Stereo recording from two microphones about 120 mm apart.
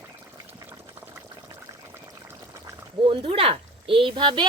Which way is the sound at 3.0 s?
50° right (ahead or behind).